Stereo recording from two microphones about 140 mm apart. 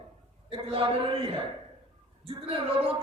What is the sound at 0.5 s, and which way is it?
Speech, 40° right (ahead or behind).